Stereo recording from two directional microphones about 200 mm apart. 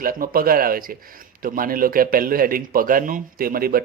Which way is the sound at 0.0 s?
45° right (ahead or behind).